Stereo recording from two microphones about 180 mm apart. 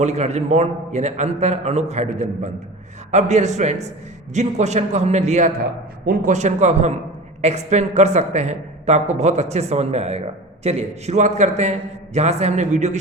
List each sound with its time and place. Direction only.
0.0 s speech: 40° right (ahead or behind)